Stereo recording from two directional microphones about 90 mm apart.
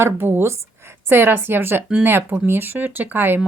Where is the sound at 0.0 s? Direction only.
25° right (ahead or behind).